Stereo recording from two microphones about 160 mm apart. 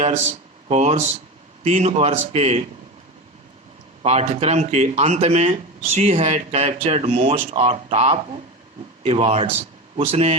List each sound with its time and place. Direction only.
0.7 s speech: 45° right (ahead or behind)
4.0 s speech: 40° right (ahead or behind)